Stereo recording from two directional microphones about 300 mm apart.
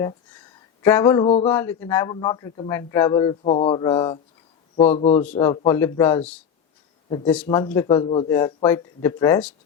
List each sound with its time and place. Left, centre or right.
0.8 s a man's voice: centre
5.2 s speech: centre
7.4 s speech: centre